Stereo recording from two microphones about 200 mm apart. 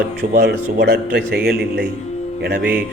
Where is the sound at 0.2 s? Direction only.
55° right (ahead or behind).